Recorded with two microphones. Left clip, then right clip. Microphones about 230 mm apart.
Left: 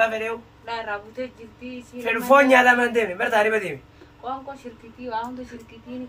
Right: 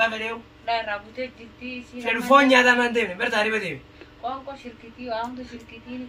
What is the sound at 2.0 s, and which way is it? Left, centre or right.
A woman's voice, centre.